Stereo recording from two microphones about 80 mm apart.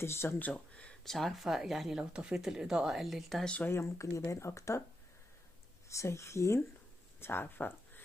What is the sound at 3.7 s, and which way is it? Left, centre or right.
Speech, left.